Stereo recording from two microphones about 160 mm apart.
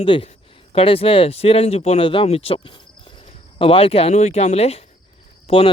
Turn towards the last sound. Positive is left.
turn(degrees=35)  # may be behind; listen again after turning